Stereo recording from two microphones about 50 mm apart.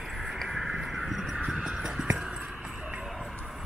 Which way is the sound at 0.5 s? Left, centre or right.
Centre.